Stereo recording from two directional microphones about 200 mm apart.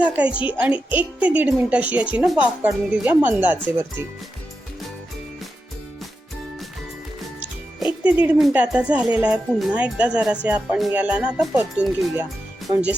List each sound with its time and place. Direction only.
0.0 s a woman's voice: 5° right (ahead or behind)
7.8 s speech: 5° right (ahead or behind)